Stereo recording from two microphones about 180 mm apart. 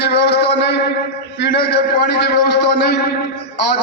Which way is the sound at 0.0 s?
70° left (ahead or behind).